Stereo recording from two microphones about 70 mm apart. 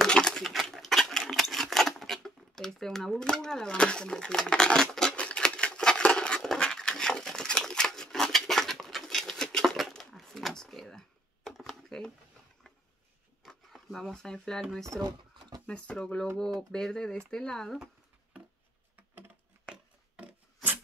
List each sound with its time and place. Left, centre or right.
0.0 s a sound: centre
13.4 s speech: centre
14.9 s drawer open or close: right
15.6 s speech: centre